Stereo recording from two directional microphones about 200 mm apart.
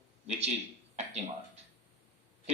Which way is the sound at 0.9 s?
30° right (ahead or behind).